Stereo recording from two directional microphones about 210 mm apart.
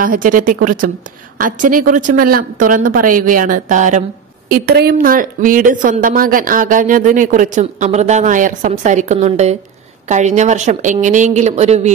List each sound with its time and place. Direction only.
0.0 s speech: 40° right (ahead or behind)
4.5 s speech: 45° right (ahead or behind); by 11.9 s 30° right (ahead or behind)